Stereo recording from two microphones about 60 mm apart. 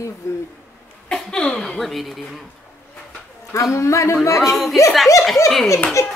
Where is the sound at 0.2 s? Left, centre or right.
Left.